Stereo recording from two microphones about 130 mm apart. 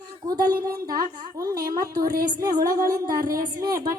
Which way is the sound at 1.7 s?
90° right.